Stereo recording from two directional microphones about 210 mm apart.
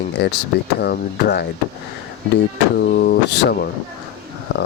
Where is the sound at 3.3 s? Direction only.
55° left (ahead or behind).